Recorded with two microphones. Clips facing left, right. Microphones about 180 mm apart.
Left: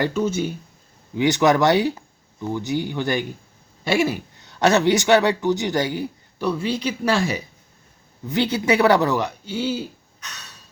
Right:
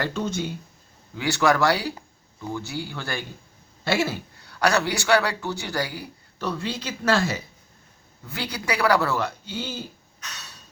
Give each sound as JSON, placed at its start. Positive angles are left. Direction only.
{"t": 0.1, "sound": "speech", "side_deg": 5}
{"t": 1.1, "sound": "speech", "side_deg": 20}
{"t": 6.4, "sound": "speech", "side_deg": 10}
{"t": 8.3, "sound": "speech", "side_deg": 25}